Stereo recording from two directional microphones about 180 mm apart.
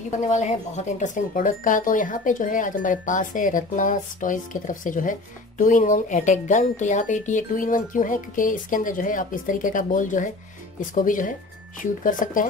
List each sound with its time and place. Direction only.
0.2 s speech: 40° left (ahead or behind)